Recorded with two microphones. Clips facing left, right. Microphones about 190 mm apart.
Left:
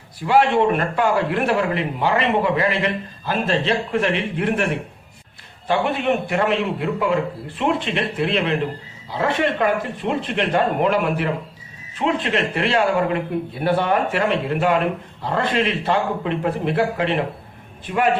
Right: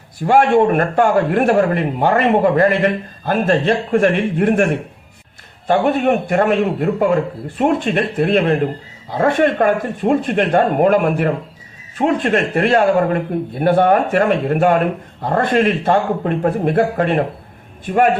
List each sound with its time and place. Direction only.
0.2 s a man's voice: 50° right (ahead or behind)